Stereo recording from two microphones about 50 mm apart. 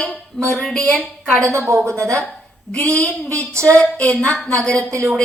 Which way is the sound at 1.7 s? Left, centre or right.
Right.